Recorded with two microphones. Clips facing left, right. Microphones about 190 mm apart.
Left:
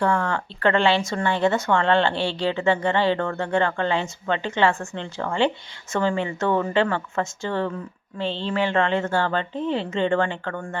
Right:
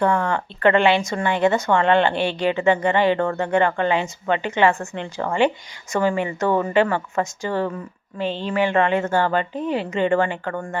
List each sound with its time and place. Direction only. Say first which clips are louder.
0.0 s speech: right 2 dB; 20° right (ahead or behind)